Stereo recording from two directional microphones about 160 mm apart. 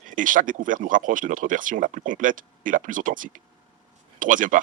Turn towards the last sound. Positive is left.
turn(degrees=-55)  # may be behind; listen again after turning